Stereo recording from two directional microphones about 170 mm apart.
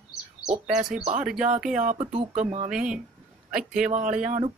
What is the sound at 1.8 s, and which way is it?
Speech, 45° right (ahead or behind).